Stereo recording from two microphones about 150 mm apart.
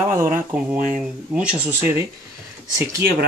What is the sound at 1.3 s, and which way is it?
Speech, 10° right (ahead or behind).